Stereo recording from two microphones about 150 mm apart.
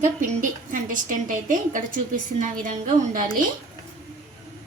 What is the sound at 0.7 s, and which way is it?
A woman's voice, 60° right (ahead or behind).